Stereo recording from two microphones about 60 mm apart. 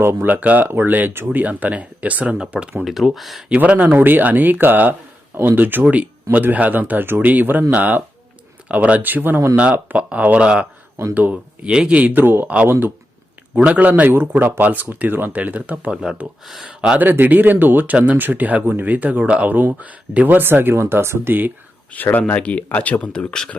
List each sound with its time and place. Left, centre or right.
0.0 s speech: right
0.3 s speech: right
2.8 s speech: centre
3.5 s speech: right
5.8 s speech: right
12.1 s speech: right
13.6 s speech: right
15.9 s speech: centre
17.0 s speech: right
21.9 s speech: left